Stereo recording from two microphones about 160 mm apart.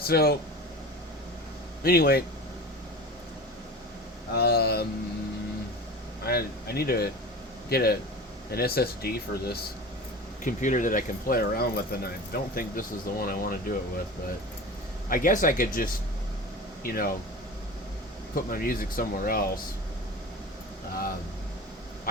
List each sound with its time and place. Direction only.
0.0 s speech: 75° left (ahead or behind)
1.8 s speech: 70° left (ahead or behind)
4.4 s speech: 80° left
6.2 s speech: 75° left (ahead or behind)
10.4 s speech: 55° left (ahead or behind)
15.1 s speech: 55° left (ahead or behind)
18.3 s speech: 65° left (ahead or behind)